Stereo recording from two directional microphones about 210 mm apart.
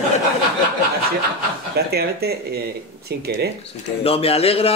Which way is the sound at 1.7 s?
50° right (ahead or behind).